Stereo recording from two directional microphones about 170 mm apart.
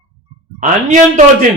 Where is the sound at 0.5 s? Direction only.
50° right (ahead or behind).